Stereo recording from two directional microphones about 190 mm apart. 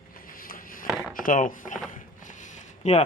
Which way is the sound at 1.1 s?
45° left (ahead or behind).